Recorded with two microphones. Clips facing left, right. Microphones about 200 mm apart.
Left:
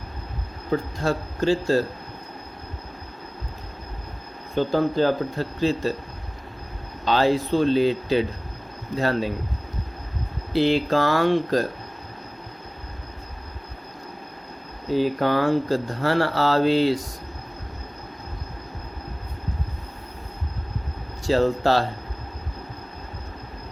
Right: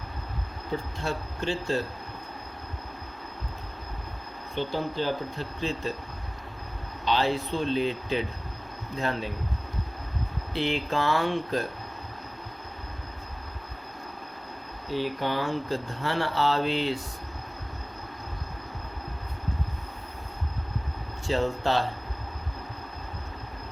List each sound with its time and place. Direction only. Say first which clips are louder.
0.9 s speech: left 7 dB; 40° left (ahead or behind)
4.5 s speech: left 8 dB; 40° left (ahead or behind)
7.0 s speech: left 6 dB; 45° left (ahead or behind)
10.5 s speech: left 8 dB; 35° left (ahead or behind)
15.3 s speech: left 8 dB; 45° left (ahead or behind)
21.2 s speech: left 6 dB; 35° left (ahead or behind)